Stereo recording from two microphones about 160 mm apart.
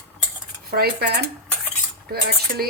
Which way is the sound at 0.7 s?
80° right.